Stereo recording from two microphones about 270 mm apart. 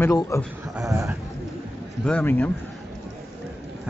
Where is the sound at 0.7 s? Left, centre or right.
Centre.